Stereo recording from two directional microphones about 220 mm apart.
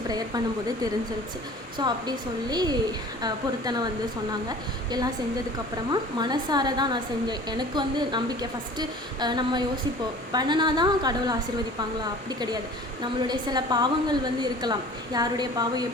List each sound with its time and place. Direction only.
1.8 s speech: 20° right (ahead or behind)
13.0 s speech: 20° right (ahead or behind)